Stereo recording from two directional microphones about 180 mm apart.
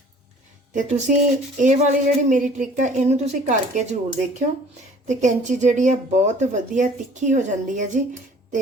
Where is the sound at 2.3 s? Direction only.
45° right (ahead or behind).